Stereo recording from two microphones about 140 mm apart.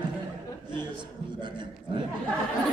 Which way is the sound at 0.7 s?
35° right (ahead or behind).